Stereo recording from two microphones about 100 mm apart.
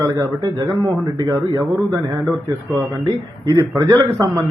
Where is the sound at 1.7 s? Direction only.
35° right (ahead or behind).